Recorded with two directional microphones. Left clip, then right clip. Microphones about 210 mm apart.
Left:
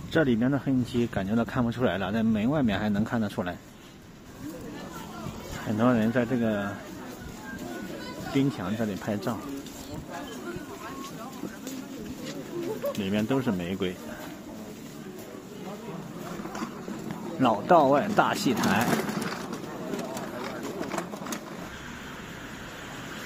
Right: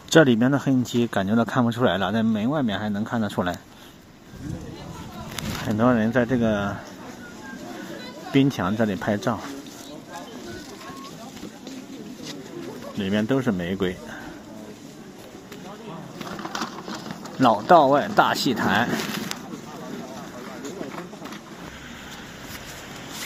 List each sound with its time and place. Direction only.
0.1 s speech: 20° right (ahead or behind); by 3.3 s centre (ahead or behind)
3.3 s speech: 15° right (ahead or behind)
5.8 s speech: 15° right (ahead or behind)
8.4 s speech: 20° right (ahead or behind)
13.0 s speech: 15° right (ahead or behind)
17.4 s speech: 10° right (ahead or behind)